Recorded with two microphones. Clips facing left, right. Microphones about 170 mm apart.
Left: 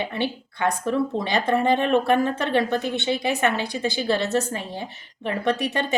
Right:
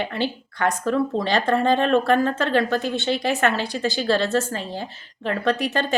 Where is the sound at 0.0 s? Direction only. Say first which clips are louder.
Right 1 dB; 15° left (ahead or behind).